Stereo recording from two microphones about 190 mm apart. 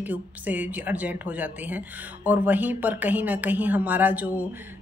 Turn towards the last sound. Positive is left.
turn(degrees=-10)  # may be behind; listen again after turning